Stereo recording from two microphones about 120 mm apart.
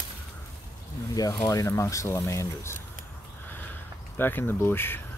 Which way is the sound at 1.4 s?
25° left (ahead or behind).